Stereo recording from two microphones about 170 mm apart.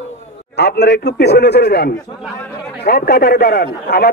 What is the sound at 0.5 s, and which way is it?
Speech, 70° left (ahead or behind).